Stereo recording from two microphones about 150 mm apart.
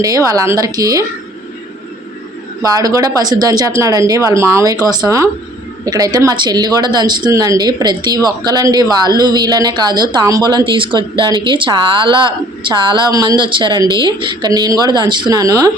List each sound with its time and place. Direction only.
0.3 s speech: 20° right (ahead or behind)
2.6 s speech: 25° right (ahead or behind)